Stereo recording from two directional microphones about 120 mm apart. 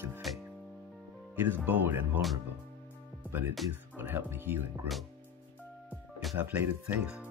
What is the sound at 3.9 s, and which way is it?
Speech, 15° right (ahead or behind).